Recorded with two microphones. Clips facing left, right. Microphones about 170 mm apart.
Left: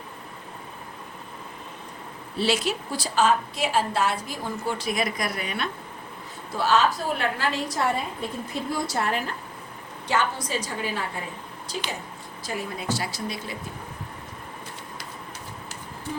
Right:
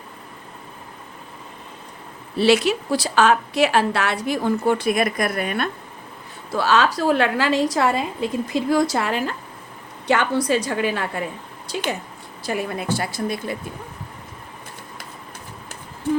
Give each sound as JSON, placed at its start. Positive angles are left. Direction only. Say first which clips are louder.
{"t": 2.4, "sound": "a woman's voice", "louder": "right 8 dB", "side_deg": -70}
{"t": 6.6, "sound": "a woman's voice", "louder": "right 3 dB", "side_deg": -90}
{"t": 10.1, "sound": "a woman's voice", "louder": "right 7 dB", "side_deg": -65}